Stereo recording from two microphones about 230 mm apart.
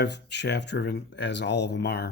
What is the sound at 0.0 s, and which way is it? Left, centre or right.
Speech, left.